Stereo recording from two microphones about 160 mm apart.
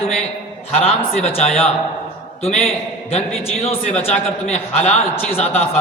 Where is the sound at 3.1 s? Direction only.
40° left (ahead or behind).